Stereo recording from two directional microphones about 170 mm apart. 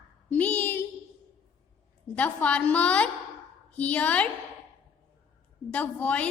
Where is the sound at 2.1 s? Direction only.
10° left (ahead or behind).